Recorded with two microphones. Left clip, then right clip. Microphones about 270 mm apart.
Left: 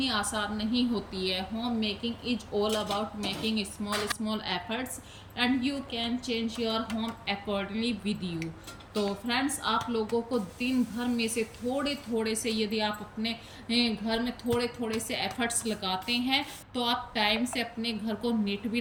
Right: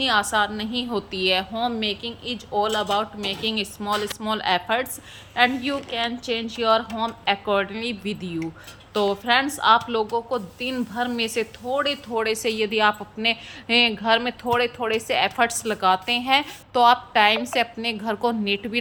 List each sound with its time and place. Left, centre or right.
0.0 s a woman's voice: centre